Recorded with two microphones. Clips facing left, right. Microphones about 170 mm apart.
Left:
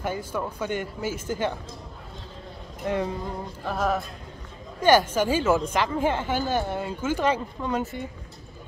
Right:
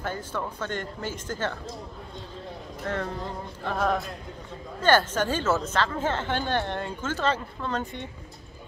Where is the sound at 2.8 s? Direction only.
15° left (ahead or behind).